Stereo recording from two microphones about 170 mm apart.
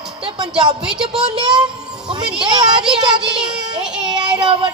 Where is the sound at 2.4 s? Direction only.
25° right (ahead or behind).